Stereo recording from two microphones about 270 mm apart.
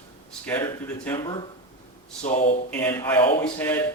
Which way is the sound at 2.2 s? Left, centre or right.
Left.